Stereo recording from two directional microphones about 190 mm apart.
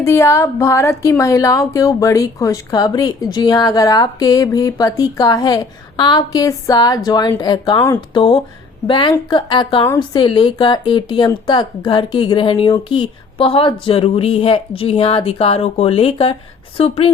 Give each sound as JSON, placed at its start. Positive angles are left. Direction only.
{"t": 0.0, "sound": "a woman's voice", "side_deg": 15}